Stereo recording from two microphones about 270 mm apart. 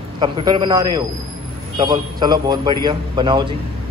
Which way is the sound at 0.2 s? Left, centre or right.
Centre.